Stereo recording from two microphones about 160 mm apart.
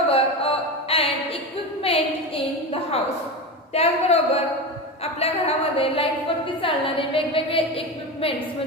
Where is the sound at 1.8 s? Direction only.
35° left (ahead or behind).